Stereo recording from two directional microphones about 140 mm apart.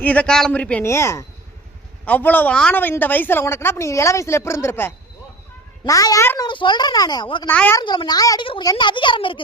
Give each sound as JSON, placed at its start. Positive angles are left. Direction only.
{"t": 0.0, "sound": "a woman's voice", "side_deg": 10}
{"t": 0.9, "sound": "a woman's voice", "side_deg": 20}
{"t": 7.4, "sound": "a woman's voice", "side_deg": 15}
{"t": 7.8, "sound": "speech", "side_deg": 30}